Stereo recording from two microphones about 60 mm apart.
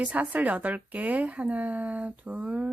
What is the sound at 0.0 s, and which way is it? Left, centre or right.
A woman's voice, right.